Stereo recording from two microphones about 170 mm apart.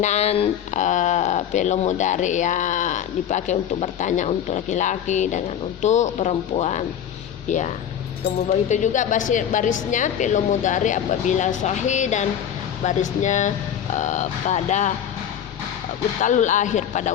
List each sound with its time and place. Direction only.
0.0 s speech: 40° left (ahead or behind)
8.4 s speech: 45° left (ahead or behind)
16.2 s speech: 45° left (ahead or behind)